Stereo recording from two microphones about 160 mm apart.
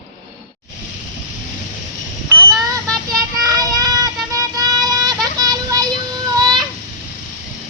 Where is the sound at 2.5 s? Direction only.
5° left (ahead or behind).